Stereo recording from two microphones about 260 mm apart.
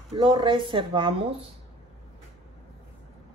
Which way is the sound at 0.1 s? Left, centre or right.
Centre.